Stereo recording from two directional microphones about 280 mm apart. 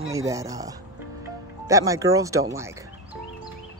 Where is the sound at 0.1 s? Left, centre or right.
Centre.